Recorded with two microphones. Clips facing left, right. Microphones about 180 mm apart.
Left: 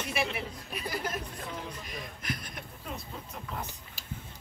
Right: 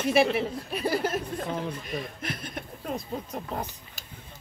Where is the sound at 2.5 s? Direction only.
40° right (ahead or behind).